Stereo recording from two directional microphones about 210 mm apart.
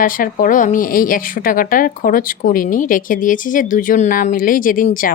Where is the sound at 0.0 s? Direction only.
40° left (ahead or behind).